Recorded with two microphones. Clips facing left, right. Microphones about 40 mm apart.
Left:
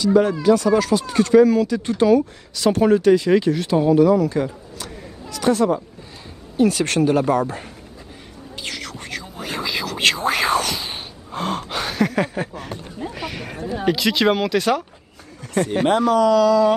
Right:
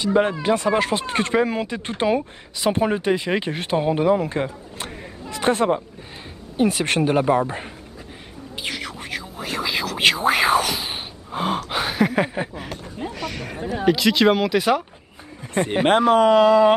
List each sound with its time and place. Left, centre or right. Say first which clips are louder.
0.0 s speech: left 3 dB; right
6.5 s a woman's voice: left 2 dB; right
8.6 s music: right 1 dB; centre
9.6 s a sound: right 1 dB; centre
13.1 s a sound: even; centre
13.7 s speech: right 2 dB; centre
15.4 s speech: left 1 dB; right
16.0 s speech: right 1 dB; right